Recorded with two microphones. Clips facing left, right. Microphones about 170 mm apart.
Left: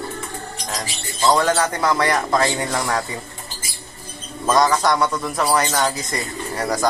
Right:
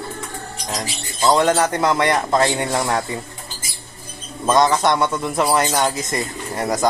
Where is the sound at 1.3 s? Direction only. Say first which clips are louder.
Right 2 dB; 20° right (ahead or behind).